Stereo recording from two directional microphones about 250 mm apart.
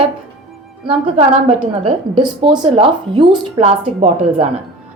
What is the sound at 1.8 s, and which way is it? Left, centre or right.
A woman's voice, centre.